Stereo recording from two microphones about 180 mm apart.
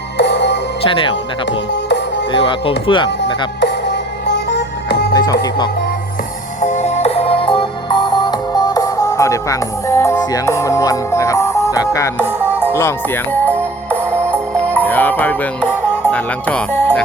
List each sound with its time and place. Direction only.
0.2 s music: 70° left (ahead or behind)
0.8 s speech: 30° left (ahead or behind)
1.5 s music: 75° left (ahead or behind)
2.3 s speech: 30° left (ahead or behind)
3.6 s music: 70° left (ahead or behind)
5.1 s music: 20° left (ahead or behind)
6.6 s music: 40° left (ahead or behind); by 17.0 s 5° left (ahead or behind)